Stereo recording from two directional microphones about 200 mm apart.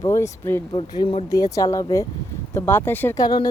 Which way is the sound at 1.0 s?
25° left (ahead or behind).